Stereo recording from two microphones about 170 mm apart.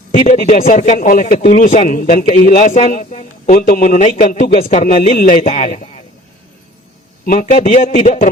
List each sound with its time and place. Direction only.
0.2 s speech: 40° left (ahead or behind)
3.5 s speech: 50° left (ahead or behind)
4.4 s speech: 35° left (ahead or behind)
4.7 s speech: 50° left (ahead or behind)
5.4 s speech: 40° left (ahead or behind)
7.3 s speech: 50° left (ahead or behind)